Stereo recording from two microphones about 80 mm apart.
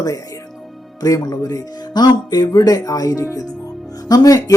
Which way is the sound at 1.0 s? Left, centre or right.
Left.